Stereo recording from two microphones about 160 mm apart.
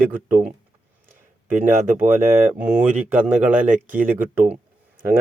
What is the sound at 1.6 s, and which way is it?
Speech, 10° right (ahead or behind).